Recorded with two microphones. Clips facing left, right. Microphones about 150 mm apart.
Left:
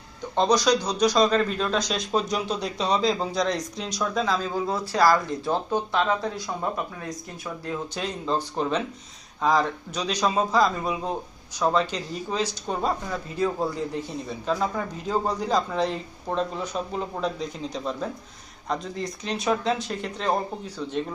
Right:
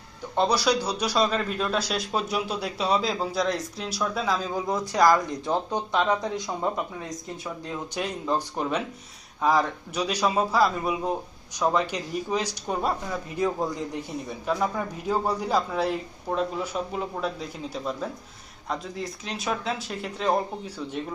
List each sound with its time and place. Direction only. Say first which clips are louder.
0.3 s speech: left 2 dB; 10° right (ahead or behind)